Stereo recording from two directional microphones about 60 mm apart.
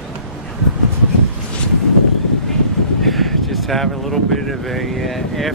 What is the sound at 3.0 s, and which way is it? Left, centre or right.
Speech, centre.